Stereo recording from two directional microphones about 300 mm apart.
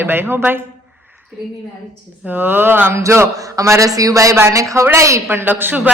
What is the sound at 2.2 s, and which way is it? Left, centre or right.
A man's voice, centre.